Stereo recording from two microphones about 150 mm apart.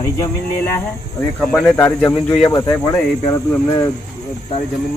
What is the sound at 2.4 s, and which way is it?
Speech, 25° left (ahead or behind).